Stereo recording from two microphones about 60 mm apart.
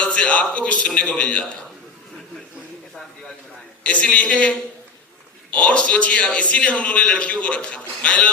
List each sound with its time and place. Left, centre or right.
0.0 s a man's voice: centre
3.8 s a man's voice: left